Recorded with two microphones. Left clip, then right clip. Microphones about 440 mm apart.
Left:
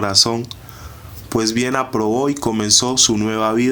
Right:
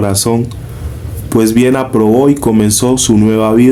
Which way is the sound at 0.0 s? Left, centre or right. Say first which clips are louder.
Right 2 dB; left.